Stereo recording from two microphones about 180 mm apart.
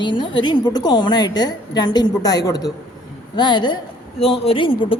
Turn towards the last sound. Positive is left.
turn(degrees=30)  # may be behind; listen again after turning